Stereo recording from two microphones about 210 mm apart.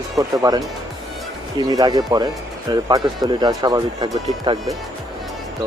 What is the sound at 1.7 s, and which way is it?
Speech, 20° right (ahead or behind).